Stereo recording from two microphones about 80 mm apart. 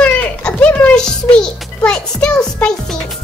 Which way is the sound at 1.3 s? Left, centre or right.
Centre.